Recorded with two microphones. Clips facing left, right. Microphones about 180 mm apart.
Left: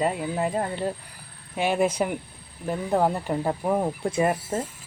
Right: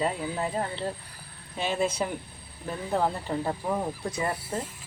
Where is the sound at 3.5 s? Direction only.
25° left (ahead or behind).